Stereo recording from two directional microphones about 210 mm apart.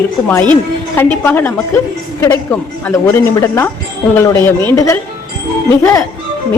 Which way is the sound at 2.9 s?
15° left (ahead or behind).